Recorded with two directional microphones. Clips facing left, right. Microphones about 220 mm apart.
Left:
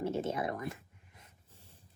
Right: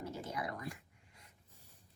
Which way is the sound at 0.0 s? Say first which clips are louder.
Left 8 dB; 25° left (ahead or behind).